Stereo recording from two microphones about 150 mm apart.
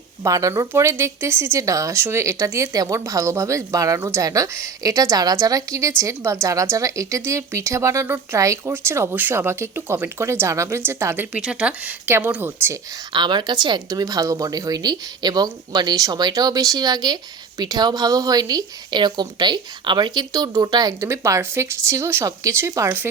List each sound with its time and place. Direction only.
0.2 s a woman's voice: 20° right (ahead or behind)
13.1 s speech: 30° right (ahead or behind)